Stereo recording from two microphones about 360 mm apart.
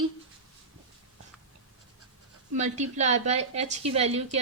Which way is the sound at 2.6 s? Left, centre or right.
Centre.